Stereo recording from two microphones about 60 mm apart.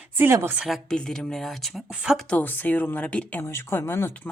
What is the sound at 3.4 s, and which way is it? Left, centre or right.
Speech, left.